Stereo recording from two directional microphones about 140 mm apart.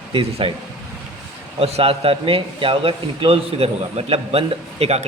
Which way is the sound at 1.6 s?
45° right (ahead or behind).